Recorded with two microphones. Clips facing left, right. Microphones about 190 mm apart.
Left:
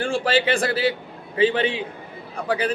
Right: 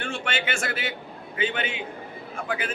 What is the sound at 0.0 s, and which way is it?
A man's voice, 35° left (ahead or behind).